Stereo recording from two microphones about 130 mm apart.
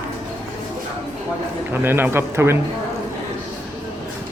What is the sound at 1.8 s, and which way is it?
Speech, 15° right (ahead or behind).